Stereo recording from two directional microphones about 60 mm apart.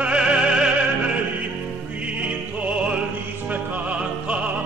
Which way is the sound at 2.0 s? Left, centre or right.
Right.